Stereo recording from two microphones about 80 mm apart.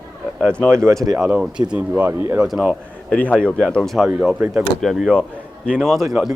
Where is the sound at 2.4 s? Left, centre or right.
Centre.